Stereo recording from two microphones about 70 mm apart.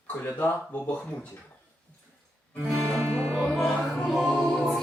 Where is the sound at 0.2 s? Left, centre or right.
Left.